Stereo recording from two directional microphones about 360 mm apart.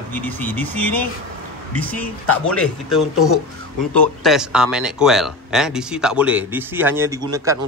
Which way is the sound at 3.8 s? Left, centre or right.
Centre.